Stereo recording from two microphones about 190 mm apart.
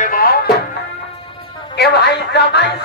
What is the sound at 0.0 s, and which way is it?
Music, 50° left (ahead or behind).